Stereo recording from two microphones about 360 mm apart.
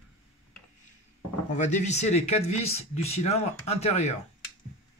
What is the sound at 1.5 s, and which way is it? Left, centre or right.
Speech, centre.